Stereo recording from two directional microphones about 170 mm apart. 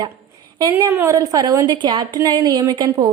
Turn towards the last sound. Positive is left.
turn(degrees=-25)  # may be behind; listen again after turning